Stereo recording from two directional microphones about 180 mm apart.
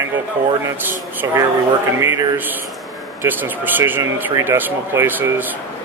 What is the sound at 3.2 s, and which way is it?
Speech, 10° right (ahead or behind).